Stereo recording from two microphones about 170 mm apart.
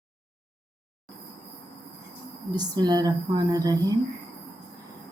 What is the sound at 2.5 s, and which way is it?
Speech, 25° right (ahead or behind).